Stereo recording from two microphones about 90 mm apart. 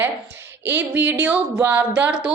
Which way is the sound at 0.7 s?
20° right (ahead or behind).